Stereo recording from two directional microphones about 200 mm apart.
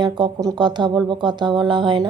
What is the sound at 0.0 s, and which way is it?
Speech, 20° right (ahead or behind).